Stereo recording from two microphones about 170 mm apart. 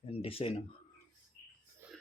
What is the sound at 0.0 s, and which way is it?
Speech, 35° left (ahead or behind).